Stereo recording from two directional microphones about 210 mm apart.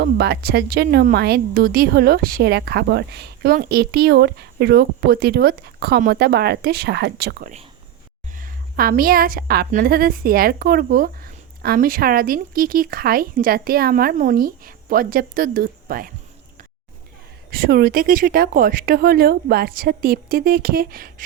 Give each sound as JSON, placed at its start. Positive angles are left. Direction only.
{"t": 0.0, "sound": "a woman's voice", "side_deg": -50}
{"t": 17.5, "sound": "a woman's voice", "side_deg": -45}